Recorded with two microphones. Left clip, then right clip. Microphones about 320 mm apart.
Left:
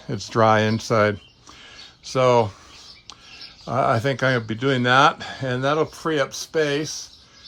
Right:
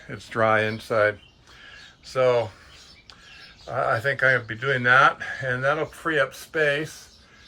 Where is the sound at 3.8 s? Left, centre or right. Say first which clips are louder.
Left 2 dB; centre.